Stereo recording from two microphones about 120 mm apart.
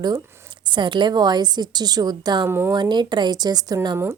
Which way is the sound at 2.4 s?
20° right (ahead or behind).